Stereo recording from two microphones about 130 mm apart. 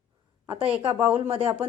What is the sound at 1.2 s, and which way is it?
Speech, 50° right (ahead or behind).